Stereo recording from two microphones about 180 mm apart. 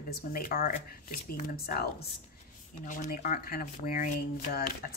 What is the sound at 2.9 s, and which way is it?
Speech, 45° left (ahead or behind).